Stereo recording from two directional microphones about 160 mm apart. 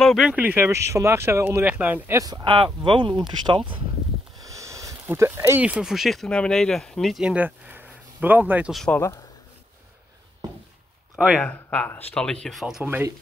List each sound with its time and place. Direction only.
0.0 s speech: centre (ahead or behind); by 3.8 s 30° right (ahead or behind)
4.4 s speech: 20° right (ahead or behind)
8.7 s speech: 5° left (ahead or behind)
11.1 s speech: centre (ahead or behind)
11.4 s speech: 10° left (ahead or behind); by 13.1 s 10° right (ahead or behind)